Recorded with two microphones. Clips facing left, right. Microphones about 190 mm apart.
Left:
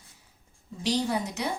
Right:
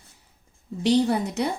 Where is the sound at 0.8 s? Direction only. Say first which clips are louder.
Right 7 dB; 60° right (ahead or behind).